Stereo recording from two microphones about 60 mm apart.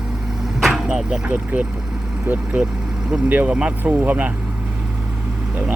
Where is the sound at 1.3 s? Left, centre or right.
Right.